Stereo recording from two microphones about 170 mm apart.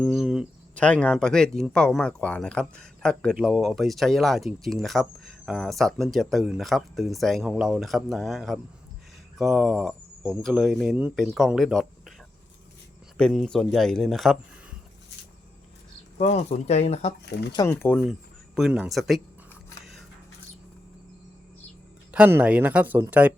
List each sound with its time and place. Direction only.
0.0 s speech: centre (ahead or behind)
13.1 s speech: 5° left (ahead or behind)
16.1 s speech: 40° left (ahead or behind)
17.6 s speech: 15° left (ahead or behind)
17.9 s speech: centre (ahead or behind)
22.1 s speech: 10° right (ahead or behind)